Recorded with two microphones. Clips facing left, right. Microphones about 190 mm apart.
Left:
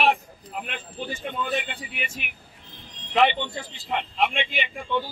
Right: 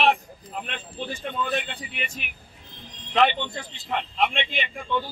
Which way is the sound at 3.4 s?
5° left (ahead or behind).